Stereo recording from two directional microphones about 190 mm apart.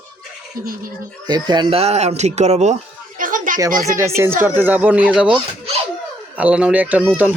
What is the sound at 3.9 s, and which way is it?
Speech, 15° right (ahead or behind).